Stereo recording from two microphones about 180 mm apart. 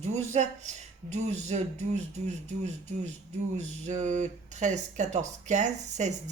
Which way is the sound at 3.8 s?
40° right (ahead or behind).